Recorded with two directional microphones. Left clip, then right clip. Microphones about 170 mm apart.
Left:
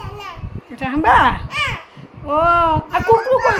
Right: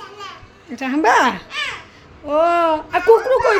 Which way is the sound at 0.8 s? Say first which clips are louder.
Left 2 dB; 35° right (ahead or behind).